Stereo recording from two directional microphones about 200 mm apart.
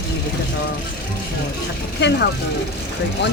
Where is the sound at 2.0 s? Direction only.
60° left (ahead or behind).